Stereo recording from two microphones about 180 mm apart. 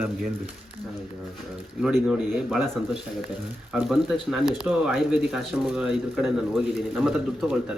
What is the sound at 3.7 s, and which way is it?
Speech, centre (ahead or behind).